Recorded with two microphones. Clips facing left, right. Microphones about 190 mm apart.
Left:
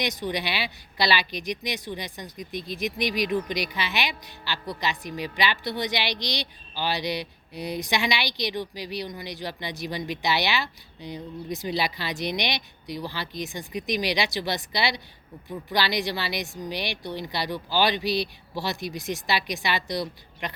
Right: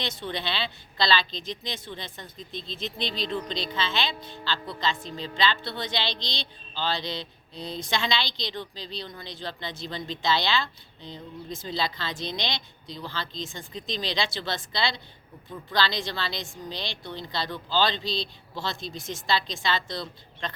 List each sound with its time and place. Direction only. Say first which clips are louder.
0.0 s speech: left 4 dB; 15° left (ahead or behind)
7.2 s a sound: left 4 dB; 20° right (ahead or behind)
7.8 s speech: left 1 dB; 15° left (ahead or behind)
18.0 s a man's voice: left 5 dB; 20° right (ahead or behind)
18.5 s speech: left 3 dB; 15° left (ahead or behind)